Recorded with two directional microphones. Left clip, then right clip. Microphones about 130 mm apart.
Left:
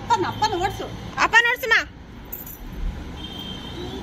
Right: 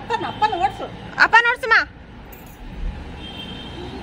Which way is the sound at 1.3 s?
25° right (ahead or behind).